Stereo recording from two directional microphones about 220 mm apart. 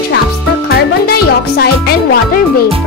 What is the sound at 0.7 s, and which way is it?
Music, 45° left (ahead or behind).